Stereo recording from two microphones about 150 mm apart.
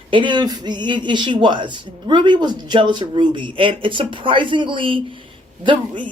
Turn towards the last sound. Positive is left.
turn(degrees=-35)  # may be behind; listen again after turning